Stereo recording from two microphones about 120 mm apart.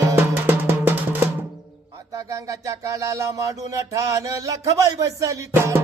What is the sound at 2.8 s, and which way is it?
Music, 25° right (ahead or behind).